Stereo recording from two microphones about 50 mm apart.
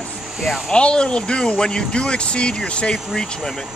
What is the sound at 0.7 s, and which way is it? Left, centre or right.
Speech, centre.